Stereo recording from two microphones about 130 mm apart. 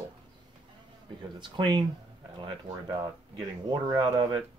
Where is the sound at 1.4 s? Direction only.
35° right (ahead or behind).